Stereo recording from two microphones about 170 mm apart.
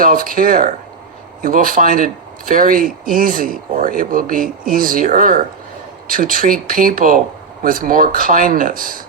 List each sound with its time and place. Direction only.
0.0 s speech: 55° right (ahead or behind)